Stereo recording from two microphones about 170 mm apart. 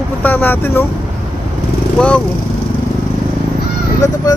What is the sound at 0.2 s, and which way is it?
Speech, 10° left (ahead or behind).